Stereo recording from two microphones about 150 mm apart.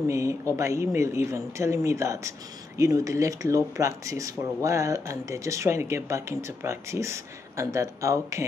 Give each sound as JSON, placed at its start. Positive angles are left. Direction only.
{"t": 0.1, "sound": "speech", "side_deg": -20}